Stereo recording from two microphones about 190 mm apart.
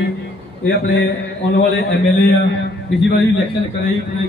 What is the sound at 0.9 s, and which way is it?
Speech, 65° left (ahead or behind).